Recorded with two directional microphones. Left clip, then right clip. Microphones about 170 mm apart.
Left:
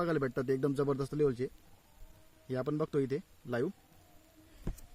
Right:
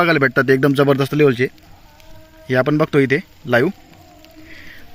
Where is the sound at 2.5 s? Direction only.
5° right (ahead or behind).